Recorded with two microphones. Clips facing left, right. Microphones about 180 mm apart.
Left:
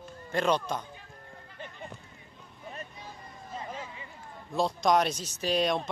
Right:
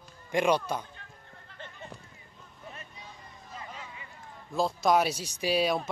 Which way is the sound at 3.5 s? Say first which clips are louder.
Left 5 dB; 30° left (ahead or behind).